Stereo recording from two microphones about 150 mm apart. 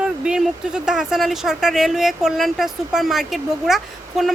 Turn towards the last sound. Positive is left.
turn(degrees=0)  # may be behind; listen again after turning